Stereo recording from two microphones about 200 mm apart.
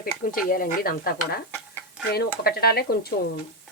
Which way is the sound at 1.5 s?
10° right (ahead or behind).